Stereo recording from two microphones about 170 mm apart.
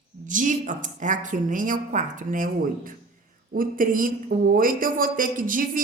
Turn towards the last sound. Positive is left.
turn(degrees=-50)  # may be behind; listen again after turning